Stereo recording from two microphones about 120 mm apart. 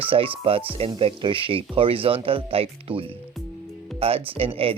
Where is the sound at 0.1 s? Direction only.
50° right (ahead or behind).